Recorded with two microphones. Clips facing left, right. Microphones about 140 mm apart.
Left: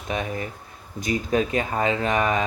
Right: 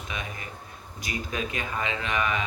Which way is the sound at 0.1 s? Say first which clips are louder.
Left 11 dB; 50° left (ahead or behind).